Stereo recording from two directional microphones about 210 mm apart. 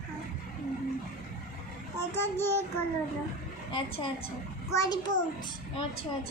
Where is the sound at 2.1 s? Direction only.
10° left (ahead or behind).